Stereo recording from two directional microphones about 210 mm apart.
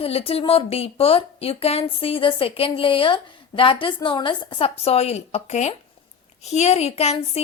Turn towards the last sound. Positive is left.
turn(degrees=30)  # may be behind; listen again after turning